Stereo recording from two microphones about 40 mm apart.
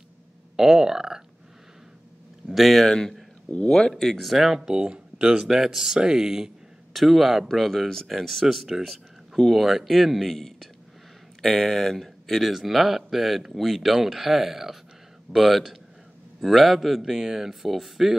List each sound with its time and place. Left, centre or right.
0.6 s speech: centre
2.5 s speech: centre
2.9 s speech: centre
3.9 s speech: centre
4.3 s speech: centre
4.6 s speech: right
5.4 s speech: centre
6.9 s speech: centre